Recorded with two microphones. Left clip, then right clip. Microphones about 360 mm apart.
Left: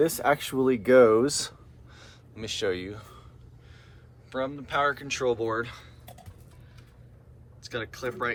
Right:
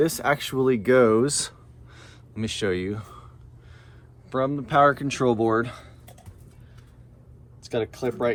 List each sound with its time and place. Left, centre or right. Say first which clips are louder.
0.0 s speech: right 1 dB; right
4.3 s speech: right 6 dB; centre
7.6 s speech: right 6 dB; centre